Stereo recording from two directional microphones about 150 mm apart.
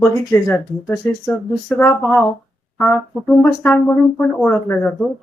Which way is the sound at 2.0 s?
10° left (ahead or behind).